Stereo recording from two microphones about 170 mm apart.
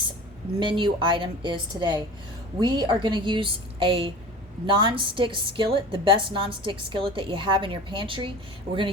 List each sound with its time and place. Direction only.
0.6 s a woman's voice: 30° right (ahead or behind)